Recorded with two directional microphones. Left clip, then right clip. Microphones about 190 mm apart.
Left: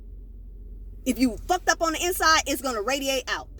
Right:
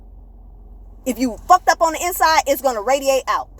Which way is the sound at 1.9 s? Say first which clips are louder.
Right 6 dB; 20° left (ahead or behind).